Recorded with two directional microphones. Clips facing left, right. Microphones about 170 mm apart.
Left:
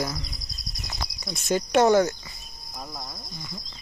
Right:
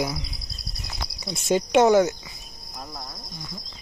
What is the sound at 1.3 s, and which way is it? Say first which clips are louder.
Speech: right 3 dB; 25° right (ahead or behind).